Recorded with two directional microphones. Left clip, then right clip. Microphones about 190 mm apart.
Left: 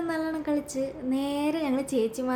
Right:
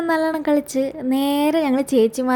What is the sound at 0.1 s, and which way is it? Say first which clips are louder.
Speech: right 14 dB; 45° right (ahead or behind).